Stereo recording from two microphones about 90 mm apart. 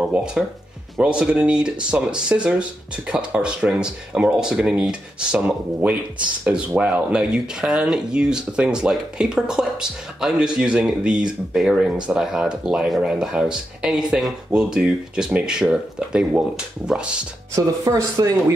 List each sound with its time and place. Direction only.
0.0 s speech: 10° right (ahead or behind)
17.6 s speech: 40° right (ahead or behind)